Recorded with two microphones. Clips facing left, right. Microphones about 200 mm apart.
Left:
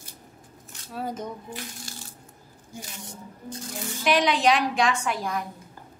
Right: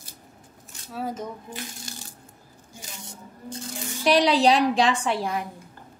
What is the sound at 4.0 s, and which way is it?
A woman's voice, 35° right (ahead or behind).